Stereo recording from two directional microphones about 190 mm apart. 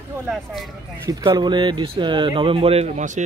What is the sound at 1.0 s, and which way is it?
A man's voice, 15° right (ahead or behind).